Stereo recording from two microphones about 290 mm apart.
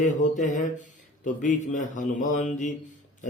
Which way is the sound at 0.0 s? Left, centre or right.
Left.